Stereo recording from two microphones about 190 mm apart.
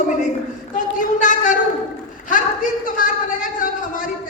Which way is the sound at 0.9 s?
45° left (ahead or behind).